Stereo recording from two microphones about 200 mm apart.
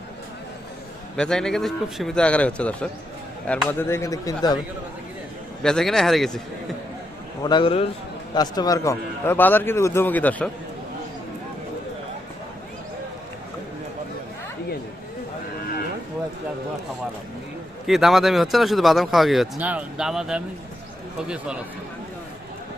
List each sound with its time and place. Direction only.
1.1 s a man's voice: 5° left (ahead or behind)
5.6 s speech: 5° left (ahead or behind)
7.4 s a man's voice: 25° left (ahead or behind); by 10.5 s 10° left (ahead or behind)
17.8 s speech: centre (ahead or behind)